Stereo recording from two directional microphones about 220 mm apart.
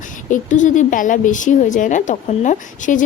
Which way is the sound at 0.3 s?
35° left (ahead or behind).